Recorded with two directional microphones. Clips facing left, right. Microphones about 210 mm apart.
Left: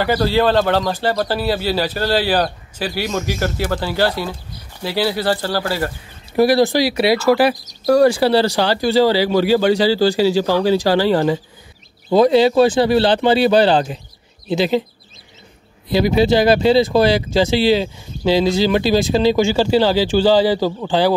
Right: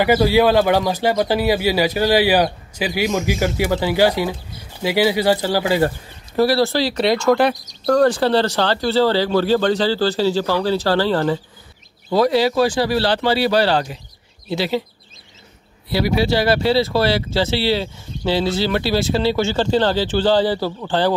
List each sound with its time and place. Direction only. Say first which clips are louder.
0.0 s speech: right 2 dB; 10° right (ahead or behind)
6.3 s speech: left 3 dB; 15° left (ahead or behind)
15.9 s speech: left 4 dB; 20° left (ahead or behind)